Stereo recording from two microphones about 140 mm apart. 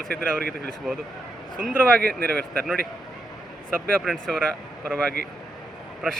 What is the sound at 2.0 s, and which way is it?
Speech, 90° right.